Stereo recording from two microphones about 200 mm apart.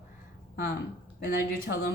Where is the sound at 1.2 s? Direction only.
50° left (ahead or behind).